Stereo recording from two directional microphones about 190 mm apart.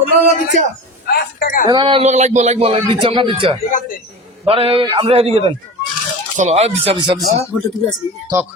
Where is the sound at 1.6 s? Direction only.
25° right (ahead or behind).